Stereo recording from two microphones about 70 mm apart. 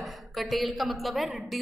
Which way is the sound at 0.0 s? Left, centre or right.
Centre.